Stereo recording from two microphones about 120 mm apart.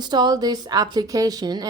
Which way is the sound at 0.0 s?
35° right (ahead or behind).